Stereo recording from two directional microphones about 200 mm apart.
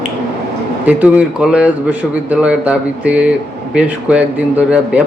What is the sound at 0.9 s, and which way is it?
A man's voice, 5° right (ahead or behind).